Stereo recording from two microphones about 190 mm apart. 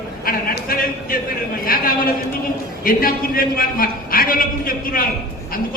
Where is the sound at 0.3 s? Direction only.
50° left (ahead or behind).